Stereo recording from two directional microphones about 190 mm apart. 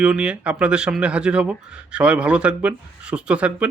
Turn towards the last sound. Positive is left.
turn(degrees=-5)  # may be behind; listen again after turning